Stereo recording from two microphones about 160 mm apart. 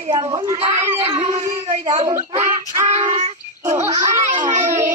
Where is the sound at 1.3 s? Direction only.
20° right (ahead or behind).